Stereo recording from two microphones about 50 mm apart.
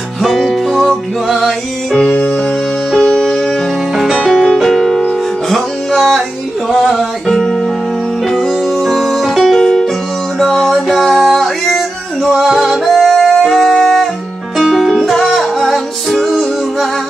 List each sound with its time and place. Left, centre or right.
0.2 s music: centre
2.0 s music: left
2.9 s music: centre
3.2 s music: centre
3.9 s music: centre
14.6 s music: centre
14.9 s music: centre